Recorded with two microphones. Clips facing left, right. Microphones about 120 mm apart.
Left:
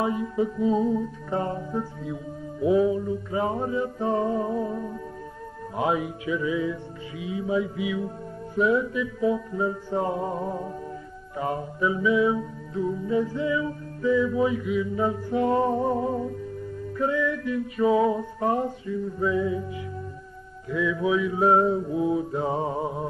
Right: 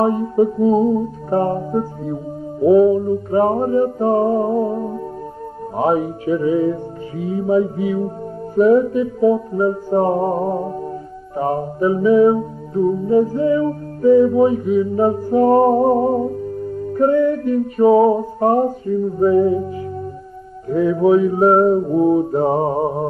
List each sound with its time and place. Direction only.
0.0 s mantra: 45° right (ahead or behind)
8.5 s music: 45° right (ahead or behind)
11.3 s mantra: 40° right (ahead or behind)
16.8 s music: 45° right (ahead or behind)